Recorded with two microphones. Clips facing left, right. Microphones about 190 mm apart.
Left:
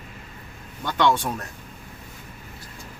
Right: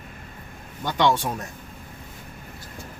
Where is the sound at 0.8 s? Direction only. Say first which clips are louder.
Even; 15° right (ahead or behind).